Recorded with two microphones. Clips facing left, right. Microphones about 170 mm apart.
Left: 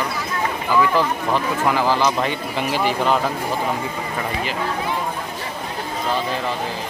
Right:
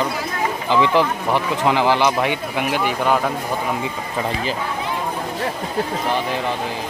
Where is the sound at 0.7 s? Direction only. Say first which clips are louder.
Right 1 dB; 20° right (ahead or behind).